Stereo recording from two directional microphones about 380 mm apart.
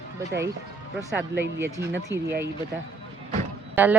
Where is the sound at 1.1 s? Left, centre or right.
Centre.